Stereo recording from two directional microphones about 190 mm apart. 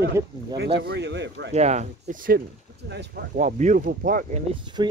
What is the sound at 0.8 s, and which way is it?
Speech, 65° right (ahead or behind).